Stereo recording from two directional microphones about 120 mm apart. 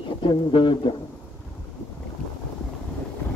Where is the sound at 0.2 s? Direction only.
40° left (ahead or behind).